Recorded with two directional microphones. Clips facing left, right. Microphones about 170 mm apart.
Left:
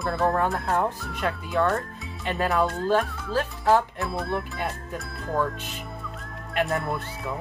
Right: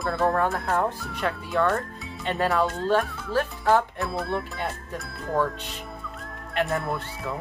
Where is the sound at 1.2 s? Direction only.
20° left (ahead or behind).